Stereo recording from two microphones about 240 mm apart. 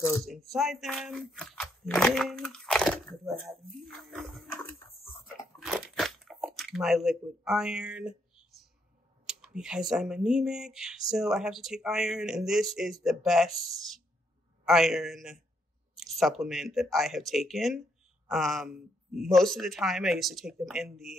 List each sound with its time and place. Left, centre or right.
0.5 s speech: centre
5.6 s crunch: centre
9.2 s a sound: centre
9.6 s speech: centre